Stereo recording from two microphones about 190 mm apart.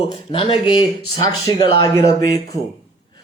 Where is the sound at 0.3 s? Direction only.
30° left (ahead or behind).